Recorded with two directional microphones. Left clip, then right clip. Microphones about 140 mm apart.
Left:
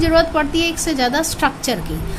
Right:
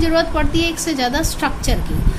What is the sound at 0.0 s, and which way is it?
A woman's voice, 20° left (ahead or behind).